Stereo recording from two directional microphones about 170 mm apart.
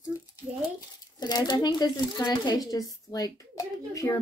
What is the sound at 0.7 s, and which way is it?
Speech, 25° left (ahead or behind).